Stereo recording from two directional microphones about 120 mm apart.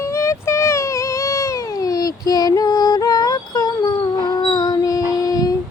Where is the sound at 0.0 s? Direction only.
25° left (ahead or behind).